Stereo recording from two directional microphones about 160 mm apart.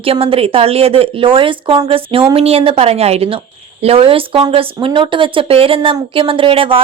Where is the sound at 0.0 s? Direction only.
35° right (ahead or behind).